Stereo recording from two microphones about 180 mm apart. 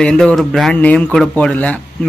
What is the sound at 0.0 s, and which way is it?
Speech, 5° left (ahead or behind).